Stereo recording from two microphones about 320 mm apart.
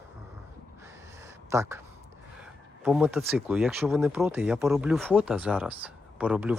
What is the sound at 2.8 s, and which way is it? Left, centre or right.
Speech, centre.